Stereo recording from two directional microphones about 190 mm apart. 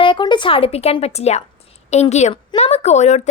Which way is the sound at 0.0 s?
25° left (ahead or behind).